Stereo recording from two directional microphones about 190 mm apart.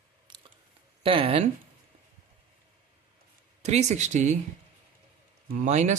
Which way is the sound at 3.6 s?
35° right (ahead or behind).